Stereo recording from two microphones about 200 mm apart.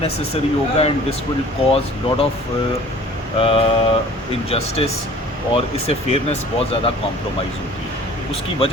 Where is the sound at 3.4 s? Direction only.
30° left (ahead or behind).